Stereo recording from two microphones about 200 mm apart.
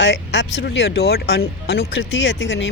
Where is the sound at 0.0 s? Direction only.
60° left (ahead or behind).